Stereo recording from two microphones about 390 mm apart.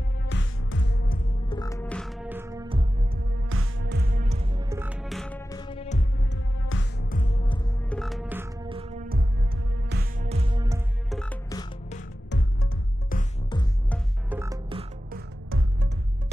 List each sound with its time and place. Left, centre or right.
0.3 s music: left
1.6 s music: centre
3.4 s music: right; by 6.4 s centre
6.6 s music: left; by 8.0 s centre
8.0 s music: centre
11.9 s music: left
13.1 s music: centre
14.3 s music: centre; by 15.9 s right